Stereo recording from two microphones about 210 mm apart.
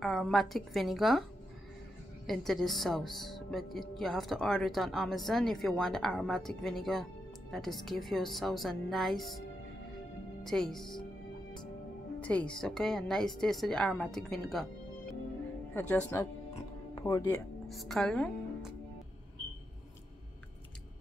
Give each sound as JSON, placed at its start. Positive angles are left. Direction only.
{"t": 0.0, "sound": "a woman's voice", "side_deg": 0}
{"t": 2.2, "sound": "a woman's voice", "side_deg": 0}
{"t": 10.4, "sound": "a woman's voice", "side_deg": 0}
{"t": 12.2, "sound": "a woman's voice", "side_deg": 5}
{"t": 17.6, "sound": "a woman's voice", "side_deg": 0}